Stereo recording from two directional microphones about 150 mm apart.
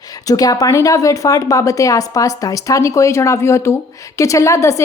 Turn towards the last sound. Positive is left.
turn(degrees=20)  # may be behind; listen again after turning